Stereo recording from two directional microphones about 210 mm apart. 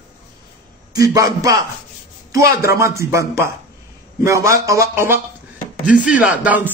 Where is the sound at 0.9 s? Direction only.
15° right (ahead or behind).